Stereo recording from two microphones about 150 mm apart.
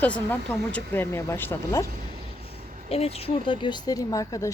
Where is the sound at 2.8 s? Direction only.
40° left (ahead or behind); by 4.5 s 20° left (ahead or behind).